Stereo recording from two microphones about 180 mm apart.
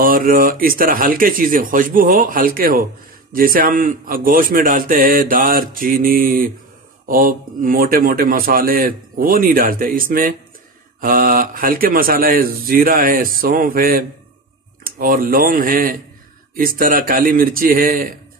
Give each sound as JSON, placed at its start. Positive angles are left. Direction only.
{"t": 0.0, "sound": "a man's voice", "side_deg": -50}